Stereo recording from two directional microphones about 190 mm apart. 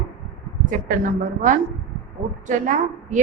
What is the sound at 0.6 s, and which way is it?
A woman's voice, 45° right (ahead or behind).